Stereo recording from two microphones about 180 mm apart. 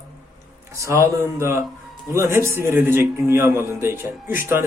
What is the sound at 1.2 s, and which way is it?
A man's voice, 15° right (ahead or behind).